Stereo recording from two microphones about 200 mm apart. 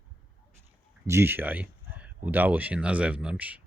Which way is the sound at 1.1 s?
10° right (ahead or behind).